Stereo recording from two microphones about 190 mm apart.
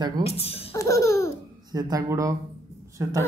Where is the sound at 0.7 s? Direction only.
15° left (ahead or behind).